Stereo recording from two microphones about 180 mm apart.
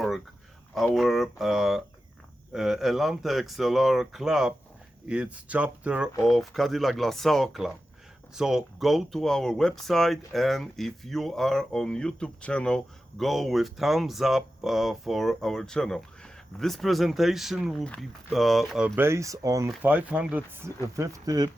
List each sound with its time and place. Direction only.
0.7 s speech: centre (ahead or behind)
18.9 s speech: 15° right (ahead or behind)